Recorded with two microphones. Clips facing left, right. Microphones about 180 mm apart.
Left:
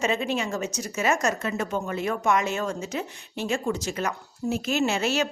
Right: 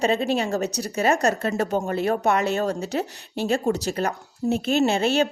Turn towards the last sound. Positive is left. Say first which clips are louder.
# right 4 dB
turn(degrees=-30)  # may be behind; listen again after turning